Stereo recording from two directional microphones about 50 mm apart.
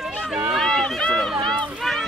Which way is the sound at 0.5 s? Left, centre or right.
Centre.